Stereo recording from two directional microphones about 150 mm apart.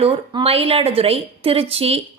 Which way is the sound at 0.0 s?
40° right (ahead or behind).